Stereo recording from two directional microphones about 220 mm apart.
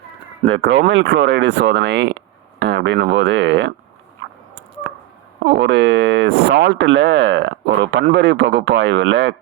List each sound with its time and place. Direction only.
0.4 s speech: 65° right (ahead or behind)
4.9 s a sound: 50° right (ahead or behind)
5.5 s speech: 55° right (ahead or behind)